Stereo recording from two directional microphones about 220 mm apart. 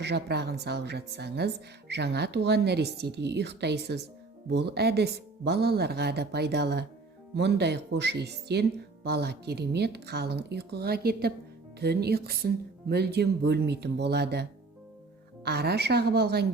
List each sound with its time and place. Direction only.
0.0 s speech: 50° right (ahead or behind)
15.4 s speech: 45° right (ahead or behind)